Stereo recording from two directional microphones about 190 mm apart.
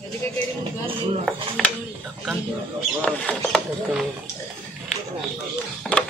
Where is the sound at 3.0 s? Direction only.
5° left (ahead or behind).